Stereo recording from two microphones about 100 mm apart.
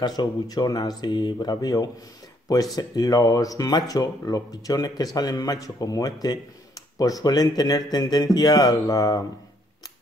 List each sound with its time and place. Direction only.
0.0 s speech: 40° left (ahead or behind)